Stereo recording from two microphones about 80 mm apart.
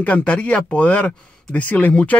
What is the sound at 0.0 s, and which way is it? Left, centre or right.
Speech, centre.